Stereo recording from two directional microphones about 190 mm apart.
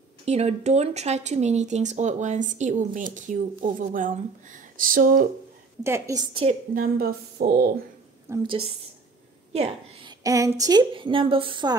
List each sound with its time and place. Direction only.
0.2 s speech: 35° right (ahead or behind)
5.9 s a woman's voice: 15° right (ahead or behind)
6.7 s speech: 50° right (ahead or behind)
8.3 s a woman's voice: 25° right (ahead or behind)
10.2 s a woman's voice: 20° right (ahead or behind)